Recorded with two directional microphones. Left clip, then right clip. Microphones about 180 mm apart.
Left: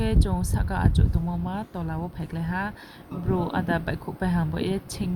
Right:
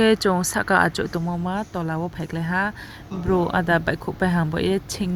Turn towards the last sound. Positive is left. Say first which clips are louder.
# right 6 dB
turn(degrees=-25)  # may be behind; listen again after turning